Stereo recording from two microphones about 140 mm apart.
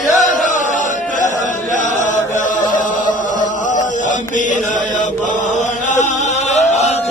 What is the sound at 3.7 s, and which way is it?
Mantra, 65° left (ahead or behind).